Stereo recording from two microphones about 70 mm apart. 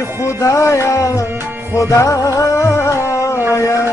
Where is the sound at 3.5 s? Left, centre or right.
Left.